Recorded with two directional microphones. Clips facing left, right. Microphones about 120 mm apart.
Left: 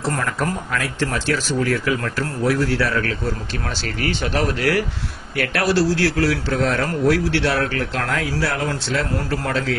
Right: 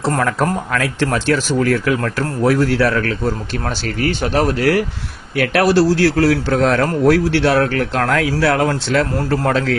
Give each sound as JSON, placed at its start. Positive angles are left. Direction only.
{"t": 0.2, "sound": "speech", "side_deg": -65}
{"t": 7.1, "sound": "speech", "side_deg": -50}